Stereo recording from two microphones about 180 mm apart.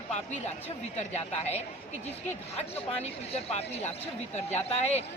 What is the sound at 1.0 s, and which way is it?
Speech, 40° left (ahead or behind).